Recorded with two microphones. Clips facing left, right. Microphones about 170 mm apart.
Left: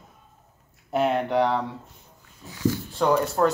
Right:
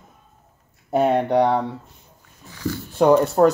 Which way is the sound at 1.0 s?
40° right (ahead or behind).